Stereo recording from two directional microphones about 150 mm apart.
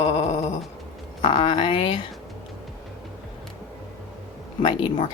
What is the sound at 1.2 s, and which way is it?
Speech, 35° left (ahead or behind).